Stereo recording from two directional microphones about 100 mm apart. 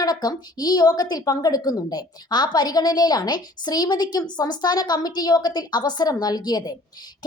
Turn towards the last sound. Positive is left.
turn(degrees=45)  # may be behind; listen again after turning